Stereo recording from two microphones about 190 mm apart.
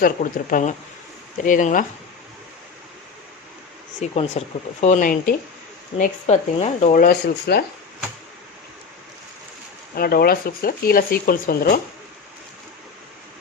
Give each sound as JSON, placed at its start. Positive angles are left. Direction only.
{"t": 0.0, "sound": "speech", "side_deg": 45}
{"t": 4.0, "sound": "speech", "side_deg": 35}
{"t": 9.9, "sound": "speech", "side_deg": 55}